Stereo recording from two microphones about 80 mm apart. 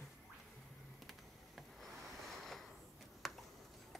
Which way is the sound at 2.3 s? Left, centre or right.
Centre.